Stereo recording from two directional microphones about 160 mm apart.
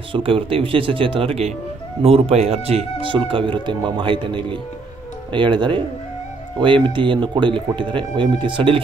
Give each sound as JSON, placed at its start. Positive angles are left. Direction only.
{"t": 0.1, "sound": "speech", "side_deg": -35}